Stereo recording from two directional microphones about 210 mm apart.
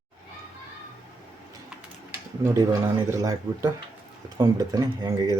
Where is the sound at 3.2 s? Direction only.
15° right (ahead or behind).